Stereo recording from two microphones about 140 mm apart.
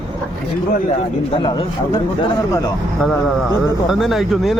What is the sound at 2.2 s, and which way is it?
Speech, 25° left (ahead or behind).